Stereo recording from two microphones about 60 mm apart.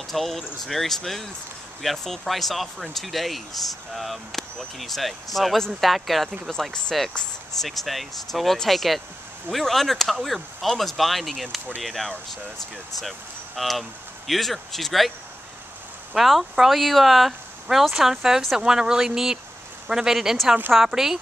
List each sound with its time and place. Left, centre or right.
0.1 s speech: centre
13.6 s speech: centre
16.2 s speech: centre